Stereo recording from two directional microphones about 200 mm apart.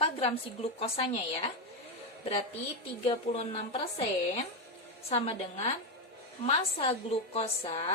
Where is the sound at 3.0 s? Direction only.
30° left (ahead or behind).